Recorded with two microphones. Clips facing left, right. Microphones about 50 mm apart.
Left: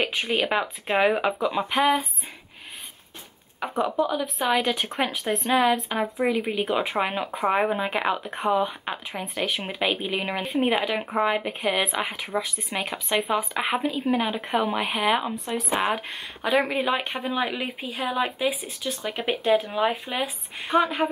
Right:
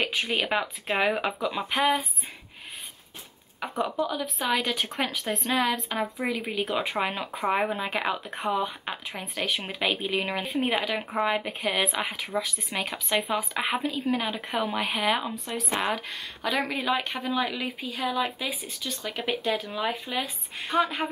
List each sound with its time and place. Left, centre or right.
0.0 s speech: centre
3.5 s speech: centre
12.2 s speech: centre
12.5 s speech: centre